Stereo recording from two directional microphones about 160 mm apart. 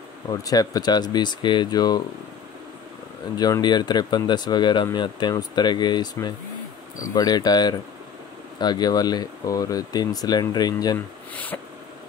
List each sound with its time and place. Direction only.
0.3 s speech: 25° left (ahead or behind)
3.3 s speech: 25° left (ahead or behind)
11.3 s a sound: 10° left (ahead or behind)